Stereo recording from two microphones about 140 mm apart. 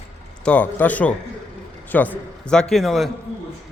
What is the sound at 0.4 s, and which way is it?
A man's voice, 10° left (ahead or behind).